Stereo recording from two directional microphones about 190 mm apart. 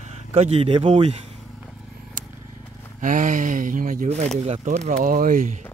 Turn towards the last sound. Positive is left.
turn(degrees=-45)  # may be behind; listen again after turning